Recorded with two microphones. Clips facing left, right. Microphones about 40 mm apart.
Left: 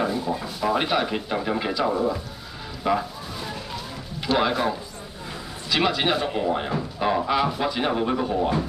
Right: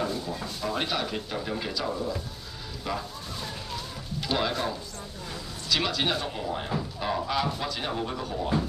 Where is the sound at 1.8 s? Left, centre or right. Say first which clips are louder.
Left 9 dB; left.